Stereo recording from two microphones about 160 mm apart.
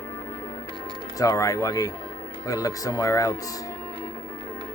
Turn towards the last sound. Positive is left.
turn(degrees=20)  # may be behind; listen again after turning